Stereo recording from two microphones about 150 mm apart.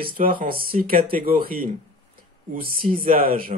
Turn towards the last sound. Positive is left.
turn(degrees=-70)  # may be behind; listen again after turning